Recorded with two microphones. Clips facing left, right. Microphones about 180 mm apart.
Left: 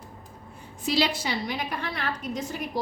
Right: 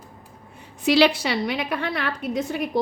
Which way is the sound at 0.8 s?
70° right (ahead or behind).